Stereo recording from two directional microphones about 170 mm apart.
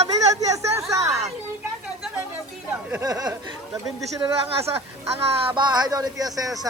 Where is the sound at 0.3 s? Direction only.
20° right (ahead or behind).